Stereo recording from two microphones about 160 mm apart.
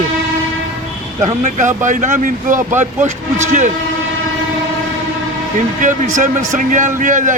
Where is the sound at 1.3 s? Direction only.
50° right (ahead or behind).